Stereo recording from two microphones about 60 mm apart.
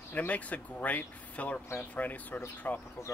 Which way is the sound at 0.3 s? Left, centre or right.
Left.